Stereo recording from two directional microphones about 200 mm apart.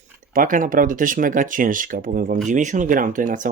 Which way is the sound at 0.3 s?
40° right (ahead or behind).